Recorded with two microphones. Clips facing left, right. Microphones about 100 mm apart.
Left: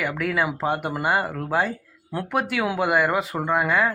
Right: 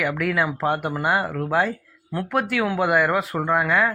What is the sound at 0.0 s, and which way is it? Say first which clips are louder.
Speech: right 1 dB; centre (ahead or behind).